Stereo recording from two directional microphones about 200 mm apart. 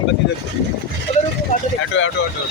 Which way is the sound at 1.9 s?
70° left (ahead or behind).